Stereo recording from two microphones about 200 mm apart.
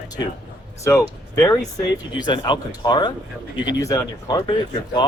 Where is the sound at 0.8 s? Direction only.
15° left (ahead or behind).